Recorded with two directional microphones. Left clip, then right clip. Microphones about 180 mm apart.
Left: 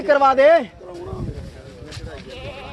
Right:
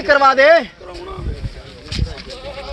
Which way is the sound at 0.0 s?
5° left (ahead or behind).